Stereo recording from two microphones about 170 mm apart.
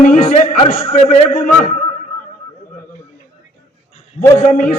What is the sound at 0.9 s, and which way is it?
Speech, 40° left (ahead or behind).